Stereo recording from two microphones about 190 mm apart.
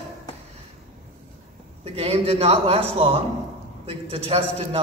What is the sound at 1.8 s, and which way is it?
A man's voice, 30° right (ahead or behind).